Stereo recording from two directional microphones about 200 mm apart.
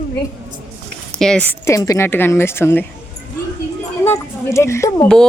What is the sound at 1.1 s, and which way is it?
A woman's voice, 5° left (ahead or behind).